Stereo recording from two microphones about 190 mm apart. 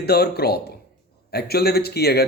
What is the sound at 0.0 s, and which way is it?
Speech, 55° left (ahead or behind).